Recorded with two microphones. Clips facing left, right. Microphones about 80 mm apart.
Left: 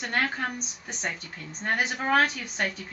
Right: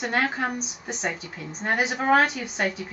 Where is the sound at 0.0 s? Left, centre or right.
Centre.